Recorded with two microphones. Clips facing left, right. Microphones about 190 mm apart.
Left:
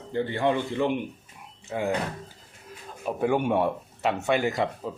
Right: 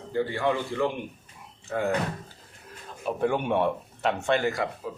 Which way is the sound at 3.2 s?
10° left (ahead or behind).